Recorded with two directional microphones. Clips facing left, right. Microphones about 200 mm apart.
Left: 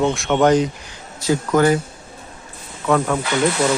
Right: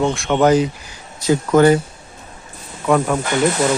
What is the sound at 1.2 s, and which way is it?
Speech, 20° right (ahead or behind).